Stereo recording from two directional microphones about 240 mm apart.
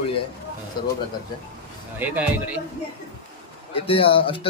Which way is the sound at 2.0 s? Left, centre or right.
Centre.